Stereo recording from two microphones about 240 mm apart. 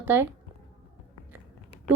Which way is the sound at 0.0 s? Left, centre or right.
Centre.